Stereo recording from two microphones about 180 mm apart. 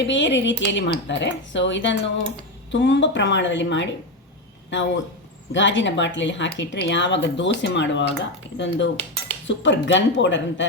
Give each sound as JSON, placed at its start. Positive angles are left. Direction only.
{"t": 0.0, "sound": "speech", "side_deg": 90}
{"t": 5.5, "sound": "speech", "side_deg": 90}